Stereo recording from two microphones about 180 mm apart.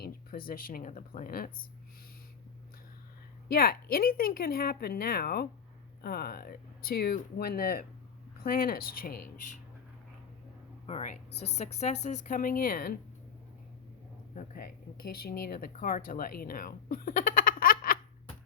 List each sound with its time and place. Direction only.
0.0 s speech: 55° left (ahead or behind)
3.5 s speech: 55° left (ahead or behind)
10.8 s a woman's voice: 40° left (ahead or behind)
14.3 s speech: 55° left (ahead or behind)